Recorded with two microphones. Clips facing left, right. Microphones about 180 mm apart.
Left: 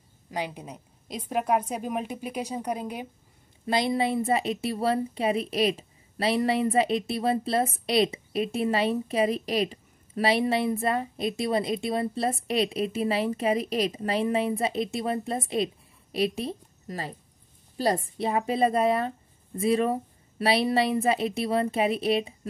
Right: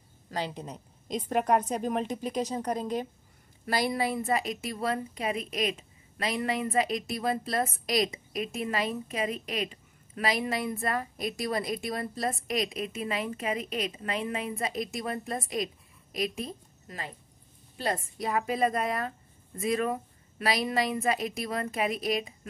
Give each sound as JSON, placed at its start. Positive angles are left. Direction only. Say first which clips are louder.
{"t": 0.3, "sound": "a woman's voice", "louder": "left 1 dB", "side_deg": 10}
{"t": 3.6, "sound": "a woman's voice", "louder": "left 3 dB", "side_deg": 25}